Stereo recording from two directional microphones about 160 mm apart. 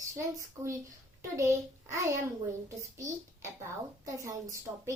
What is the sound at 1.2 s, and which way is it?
Speech, 15° right (ahead or behind).